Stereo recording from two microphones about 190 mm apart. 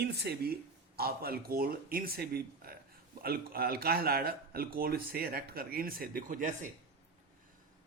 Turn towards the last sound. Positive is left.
turn(degrees=-45)  # may be behind; listen again after turning